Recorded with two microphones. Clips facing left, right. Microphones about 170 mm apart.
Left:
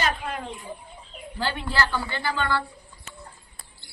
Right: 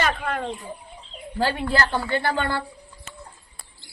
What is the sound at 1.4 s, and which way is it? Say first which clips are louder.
Speech: right 4 dB; 40° right (ahead or behind).